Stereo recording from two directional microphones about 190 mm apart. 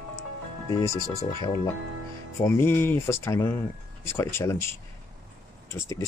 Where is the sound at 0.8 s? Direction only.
15° left (ahead or behind).